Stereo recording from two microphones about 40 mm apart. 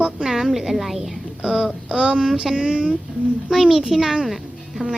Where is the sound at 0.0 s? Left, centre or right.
Centre.